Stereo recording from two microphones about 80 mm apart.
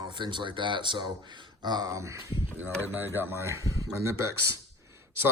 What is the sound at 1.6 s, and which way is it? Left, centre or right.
Speech, right.